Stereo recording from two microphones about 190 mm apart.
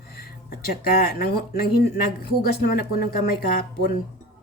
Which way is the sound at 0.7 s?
50° left (ahead or behind).